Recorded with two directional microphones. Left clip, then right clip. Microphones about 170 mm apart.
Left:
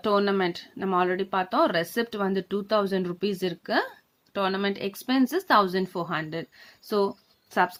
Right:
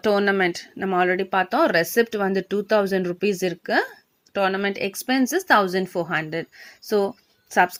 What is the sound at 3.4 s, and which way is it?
Speech, 20° right (ahead or behind).